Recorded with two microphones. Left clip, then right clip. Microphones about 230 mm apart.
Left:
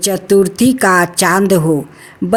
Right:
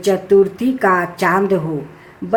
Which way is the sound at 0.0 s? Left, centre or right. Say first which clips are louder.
Left 1 dB; left.